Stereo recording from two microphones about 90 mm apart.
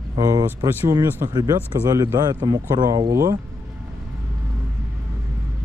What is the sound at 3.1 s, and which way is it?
Speech, 35° right (ahead or behind).